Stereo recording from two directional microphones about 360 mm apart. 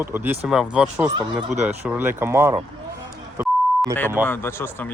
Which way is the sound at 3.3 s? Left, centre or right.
Centre.